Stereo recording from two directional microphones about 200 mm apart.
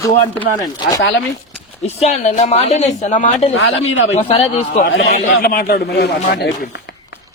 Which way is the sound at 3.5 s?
70° left (ahead or behind).